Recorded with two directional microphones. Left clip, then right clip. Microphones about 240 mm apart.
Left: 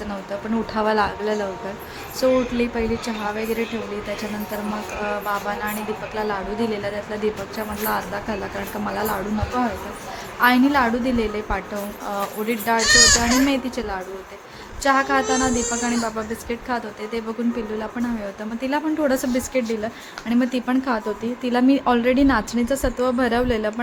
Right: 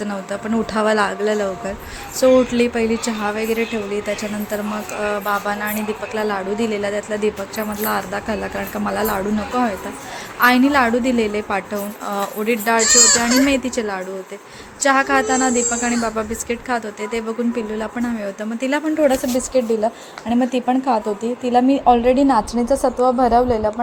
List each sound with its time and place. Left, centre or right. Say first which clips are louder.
0.7 s a woman's voice: right 3 dB; centre
5.0 s a woman's voice: right 4 dB; centre
10.4 s a woman's voice: right 3 dB; centre
18.6 s a woman's voice: right 5 dB; centre